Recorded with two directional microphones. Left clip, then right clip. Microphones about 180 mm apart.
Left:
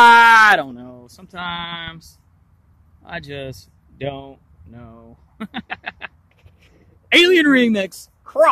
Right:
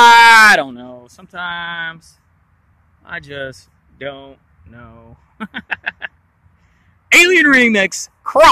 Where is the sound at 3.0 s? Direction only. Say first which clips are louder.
Right 4 dB; 10° left (ahead or behind).